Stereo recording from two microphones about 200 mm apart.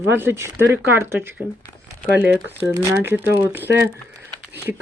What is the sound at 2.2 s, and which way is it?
A woman's voice, 10° right (ahead or behind).